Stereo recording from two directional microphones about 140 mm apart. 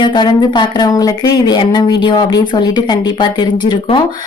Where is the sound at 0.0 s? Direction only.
35° left (ahead or behind).